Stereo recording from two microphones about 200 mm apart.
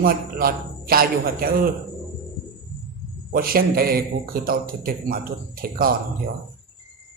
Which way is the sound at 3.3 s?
45° right (ahead or behind).